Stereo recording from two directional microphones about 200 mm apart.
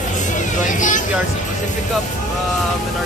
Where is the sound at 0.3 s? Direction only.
40° left (ahead or behind).